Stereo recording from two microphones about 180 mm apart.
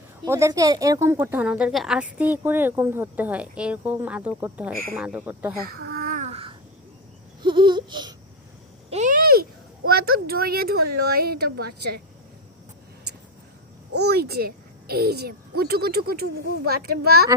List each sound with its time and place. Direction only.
0.3 s speech: 15° right (ahead or behind)
5.6 s babbling: 55° right (ahead or behind); by 6.6 s 30° right (ahead or behind)
7.4 s a sound: 25° right (ahead or behind)
8.9 s speech: 45° right (ahead or behind); by 11.9 s 65° right (ahead or behind)
14.0 s a woman's voice: 60° right (ahead or behind)